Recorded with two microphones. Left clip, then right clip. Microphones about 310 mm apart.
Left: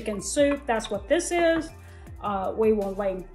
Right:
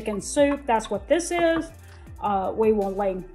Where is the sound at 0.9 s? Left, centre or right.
Right.